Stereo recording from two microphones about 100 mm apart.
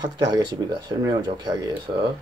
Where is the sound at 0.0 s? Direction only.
45° right (ahead or behind).